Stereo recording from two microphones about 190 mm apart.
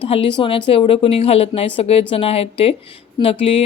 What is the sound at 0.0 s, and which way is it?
Speech, 30° left (ahead or behind).